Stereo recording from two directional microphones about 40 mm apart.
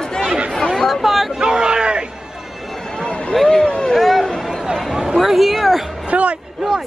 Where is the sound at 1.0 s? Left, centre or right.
Centre.